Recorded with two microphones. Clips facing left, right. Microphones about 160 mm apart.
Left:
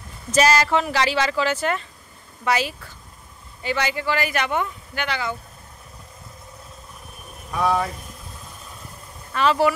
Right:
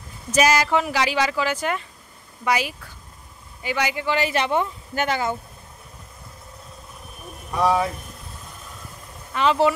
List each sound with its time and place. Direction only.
0.3 s speech: 10° right (ahead or behind); by 4.6 s 30° right (ahead or behind)
4.9 s speech: 45° right (ahead or behind)
7.6 s speech: 10° right (ahead or behind)
9.3 s speech: 20° right (ahead or behind)